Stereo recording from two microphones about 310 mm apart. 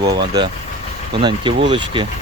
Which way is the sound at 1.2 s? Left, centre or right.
Centre.